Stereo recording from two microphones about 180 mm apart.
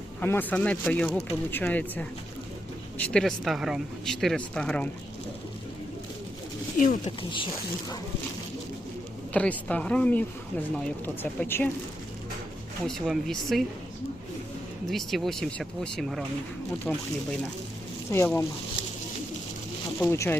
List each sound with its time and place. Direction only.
0.2 s speech: 10° left (ahead or behind)
6.7 s speech: 45° left (ahead or behind)
7.0 s speech: 30° left (ahead or behind)
9.3 s speech: 10° left (ahead or behind)
12.9 s speech: centre (ahead or behind)
14.8 s speech: centre (ahead or behind)
18.1 s speech: 15° left (ahead or behind)
20.0 s speech: 15° left (ahead or behind)